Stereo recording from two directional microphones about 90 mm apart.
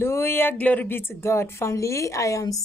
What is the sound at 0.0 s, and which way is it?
A woman's voice, 30° left (ahead or behind).